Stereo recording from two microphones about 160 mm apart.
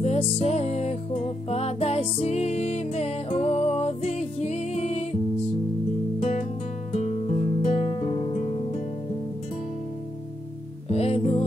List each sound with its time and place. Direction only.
0.0 s music: 40° left (ahead or behind)
6.1 s music: 45° left (ahead or behind)
7.9 s music: 30° left (ahead or behind)
10.9 s music: 40° left (ahead or behind)